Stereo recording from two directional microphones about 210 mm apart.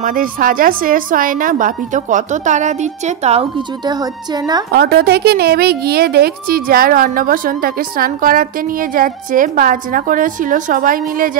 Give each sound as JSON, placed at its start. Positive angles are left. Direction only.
{"t": 0.0, "sound": "speech", "side_deg": -40}
{"t": 4.7, "sound": "a woman's voice", "side_deg": -50}